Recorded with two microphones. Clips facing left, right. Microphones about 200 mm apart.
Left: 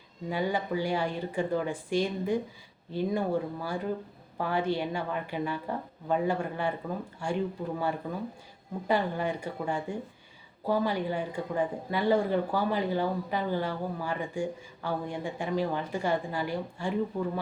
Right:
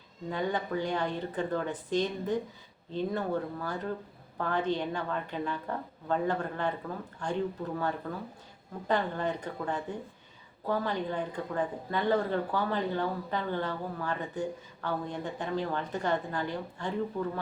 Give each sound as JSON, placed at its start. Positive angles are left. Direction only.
{"t": 0.3, "sound": "speech", "side_deg": 10}